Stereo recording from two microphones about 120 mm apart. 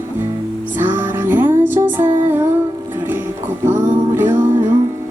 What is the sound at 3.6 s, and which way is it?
Music, 20° right (ahead or behind).